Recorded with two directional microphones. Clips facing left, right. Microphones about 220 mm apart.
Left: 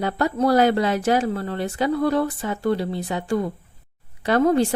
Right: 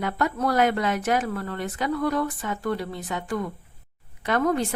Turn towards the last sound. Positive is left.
turn(degrees=30)  # may be behind; listen again after turning